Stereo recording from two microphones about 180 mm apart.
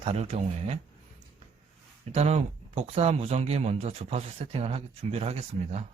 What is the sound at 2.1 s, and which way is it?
Speech, 40° right (ahead or behind).